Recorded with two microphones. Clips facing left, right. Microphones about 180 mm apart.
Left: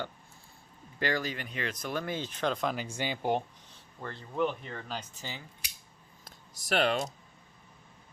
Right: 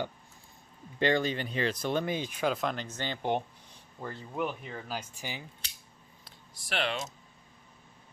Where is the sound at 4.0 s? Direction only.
10° right (ahead or behind).